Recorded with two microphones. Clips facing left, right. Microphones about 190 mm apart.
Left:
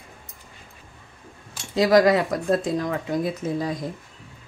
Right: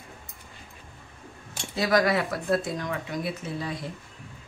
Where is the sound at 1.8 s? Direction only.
25° left (ahead or behind).